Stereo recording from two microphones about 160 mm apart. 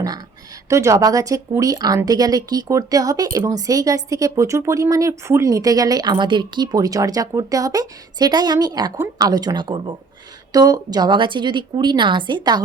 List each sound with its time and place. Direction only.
0.7 s speech: 20° right (ahead or behind)